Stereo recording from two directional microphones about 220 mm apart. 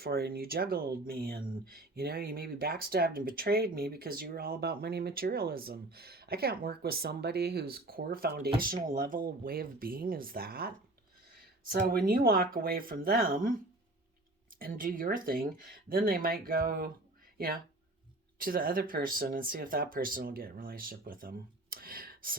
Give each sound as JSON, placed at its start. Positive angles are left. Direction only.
{"t": 0.0, "sound": "speech", "side_deg": -45}
{"t": 11.7, "sound": "speech", "side_deg": -40}
{"t": 14.6, "sound": "speech", "side_deg": -40}